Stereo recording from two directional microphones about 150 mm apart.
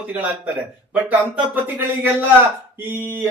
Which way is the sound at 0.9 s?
10° right (ahead or behind).